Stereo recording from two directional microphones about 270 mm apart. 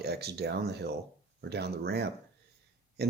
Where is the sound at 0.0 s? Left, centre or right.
Right.